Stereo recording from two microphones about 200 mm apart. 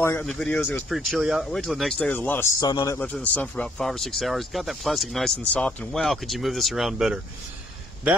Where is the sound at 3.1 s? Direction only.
5° left (ahead or behind).